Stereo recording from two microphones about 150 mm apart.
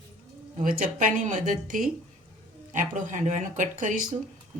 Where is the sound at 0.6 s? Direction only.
60° right (ahead or behind).